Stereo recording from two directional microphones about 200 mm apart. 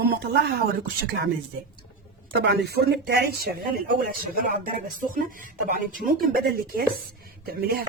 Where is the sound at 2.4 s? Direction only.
55° right (ahead or behind).